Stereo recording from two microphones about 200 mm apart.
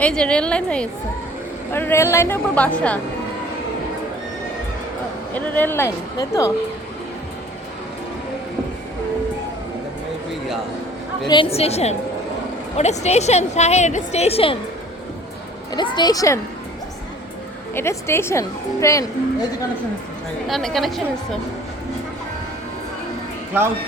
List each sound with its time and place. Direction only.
0.0 s a woman's voice: 5° left (ahead or behind)
5.3 s a woman's voice: 10° left (ahead or behind)
11.3 s a woman's voice: 25° left (ahead or behind)
15.7 s speech: 20° left (ahead or behind)
17.7 s a woman's voice: 10° left (ahead or behind)
20.5 s a woman's voice: centre (ahead or behind)